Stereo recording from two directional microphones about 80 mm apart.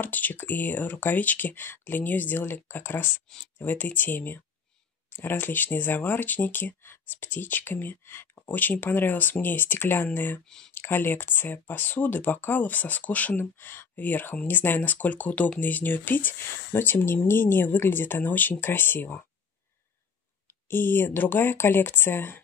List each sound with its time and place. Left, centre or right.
0.0 s speech: left
10.4 s speech: centre
10.7 s speech: left
20.6 s speech: left